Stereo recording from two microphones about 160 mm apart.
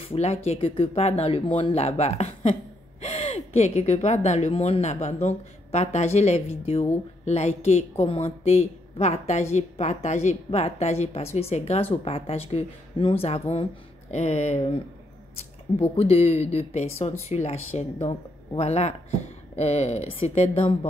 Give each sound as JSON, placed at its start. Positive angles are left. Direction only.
{"t": 0.0, "sound": "speech", "side_deg": 40}